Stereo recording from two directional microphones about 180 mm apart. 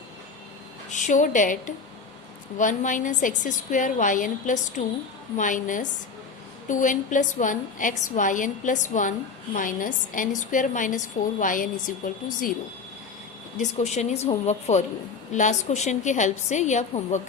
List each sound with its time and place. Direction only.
0.9 s a woman's voice: 45° left (ahead or behind)
13.6 s a woman's voice: 40° left (ahead or behind)